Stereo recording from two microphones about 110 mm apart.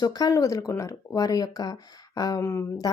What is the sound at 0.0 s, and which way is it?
Speech, 35° left (ahead or behind).